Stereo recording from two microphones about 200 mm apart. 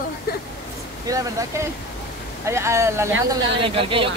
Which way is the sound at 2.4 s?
15° right (ahead or behind).